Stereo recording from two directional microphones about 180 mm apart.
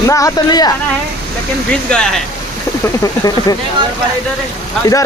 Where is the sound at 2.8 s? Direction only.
20° left (ahead or behind).